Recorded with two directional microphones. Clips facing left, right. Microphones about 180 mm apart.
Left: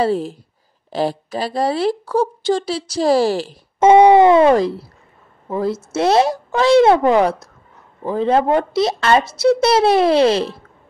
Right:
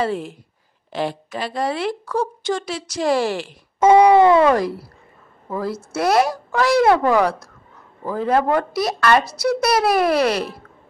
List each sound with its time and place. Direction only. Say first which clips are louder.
0.0 s a woman's voice: left 5 dB; 35° left (ahead or behind)
3.8 s a woman's voice: left 2 dB; 20° left (ahead or behind)